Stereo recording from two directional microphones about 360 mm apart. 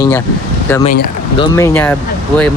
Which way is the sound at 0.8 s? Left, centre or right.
Left.